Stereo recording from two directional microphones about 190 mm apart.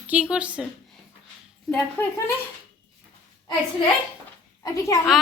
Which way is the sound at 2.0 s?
10° left (ahead or behind).